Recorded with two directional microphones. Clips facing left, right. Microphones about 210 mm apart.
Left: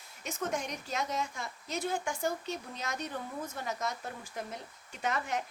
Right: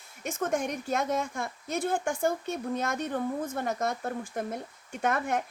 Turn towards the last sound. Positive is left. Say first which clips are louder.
# right 5 dB
turn(degrees=-50)  # may be behind; listen again after turning